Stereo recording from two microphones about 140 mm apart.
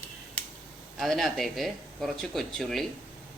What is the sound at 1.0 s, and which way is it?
Speech, centre (ahead or behind).